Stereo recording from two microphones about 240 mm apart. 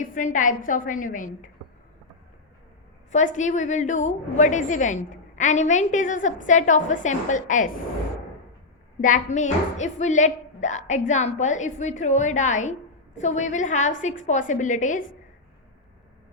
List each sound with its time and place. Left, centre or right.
0.0 s a woman's voice: left
3.1 s a woman's voice: left
9.0 s a woman's voice: left